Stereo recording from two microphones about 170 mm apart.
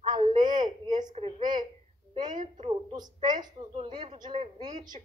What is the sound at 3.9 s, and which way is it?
Speech, 45° right (ahead or behind).